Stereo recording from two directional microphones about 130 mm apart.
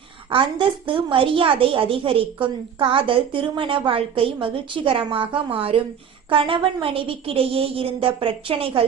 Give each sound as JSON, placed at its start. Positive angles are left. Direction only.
{"t": 0.3, "sound": "a woman's voice", "side_deg": -40}